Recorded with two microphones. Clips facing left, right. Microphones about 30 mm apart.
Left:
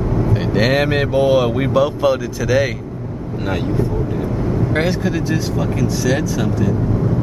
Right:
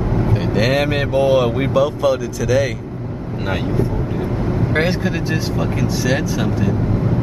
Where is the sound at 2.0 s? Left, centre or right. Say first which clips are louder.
Left 1 dB; centre.